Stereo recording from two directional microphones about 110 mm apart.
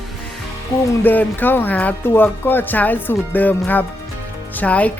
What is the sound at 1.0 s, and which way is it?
Speech, 15° left (ahead or behind).